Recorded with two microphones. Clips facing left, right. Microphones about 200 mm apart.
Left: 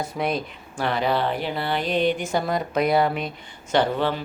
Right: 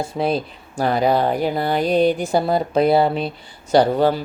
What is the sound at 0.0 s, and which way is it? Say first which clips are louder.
Speech: right 5 dB; 30° right (ahead or behind).